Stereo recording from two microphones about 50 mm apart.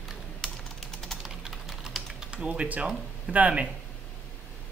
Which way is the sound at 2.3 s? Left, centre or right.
Right.